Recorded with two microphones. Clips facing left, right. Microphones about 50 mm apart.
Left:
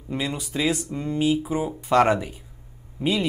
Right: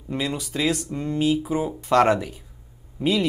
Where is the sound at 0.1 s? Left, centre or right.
Centre.